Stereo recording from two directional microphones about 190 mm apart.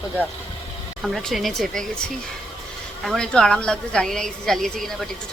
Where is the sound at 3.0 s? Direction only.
Centre (ahead or behind).